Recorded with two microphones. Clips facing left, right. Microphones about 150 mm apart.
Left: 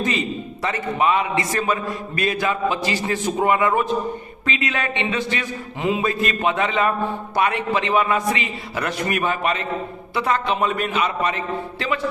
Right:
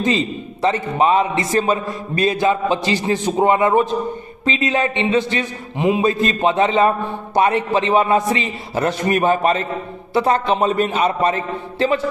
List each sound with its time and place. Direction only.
0.0 s a man's voice: 25° right (ahead or behind)